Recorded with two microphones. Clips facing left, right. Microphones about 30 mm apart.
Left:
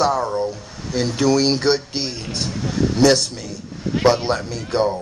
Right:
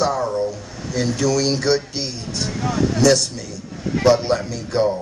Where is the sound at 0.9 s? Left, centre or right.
Left.